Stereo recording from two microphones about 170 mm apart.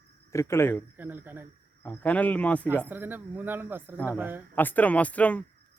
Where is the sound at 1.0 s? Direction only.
10° right (ahead or behind).